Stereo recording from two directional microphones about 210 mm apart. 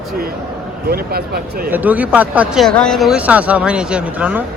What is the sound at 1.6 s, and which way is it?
A man's voice, 10° right (ahead or behind).